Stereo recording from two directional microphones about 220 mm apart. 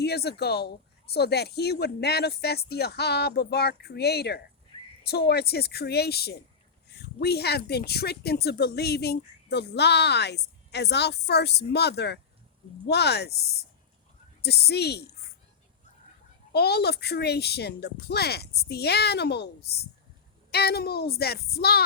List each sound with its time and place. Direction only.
0.0 s speech: 45° left (ahead or behind)
16.5 s speech: 45° left (ahead or behind)